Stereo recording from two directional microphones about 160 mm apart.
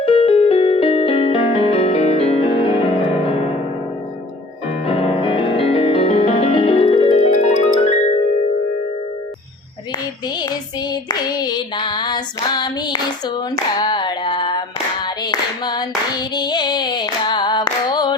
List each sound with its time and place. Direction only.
0.0 s music: 35° left (ahead or behind)
4.9 s music: 35° left (ahead or behind)
7.3 s music: 50° left (ahead or behind)
10.2 s child singing: 25° left (ahead or behind)
15.0 s clapping: 25° left (ahead or behind)